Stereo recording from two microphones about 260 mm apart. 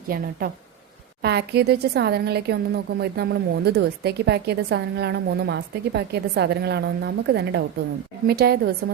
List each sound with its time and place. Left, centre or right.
0.1 s a woman's voice: right